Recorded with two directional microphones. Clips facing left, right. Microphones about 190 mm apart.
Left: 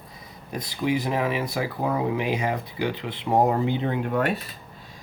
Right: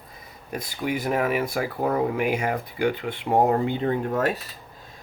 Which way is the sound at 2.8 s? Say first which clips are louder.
Right 6 dB; 50° right (ahead or behind).